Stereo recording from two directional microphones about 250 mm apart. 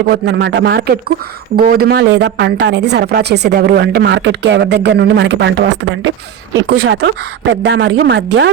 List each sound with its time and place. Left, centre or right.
0.1 s speech: right